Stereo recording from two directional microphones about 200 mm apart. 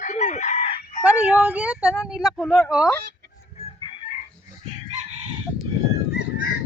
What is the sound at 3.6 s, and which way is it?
Chicken, 30° left (ahead or behind).